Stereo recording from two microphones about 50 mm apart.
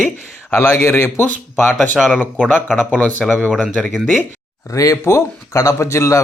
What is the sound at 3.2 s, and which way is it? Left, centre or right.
Speech, centre.